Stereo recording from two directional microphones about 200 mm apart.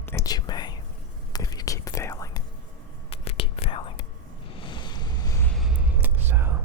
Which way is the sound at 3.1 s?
30° left (ahead or behind).